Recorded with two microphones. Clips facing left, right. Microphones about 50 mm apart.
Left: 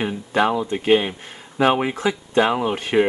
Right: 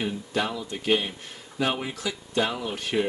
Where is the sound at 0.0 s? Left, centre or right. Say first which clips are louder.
Left 8 dB; left.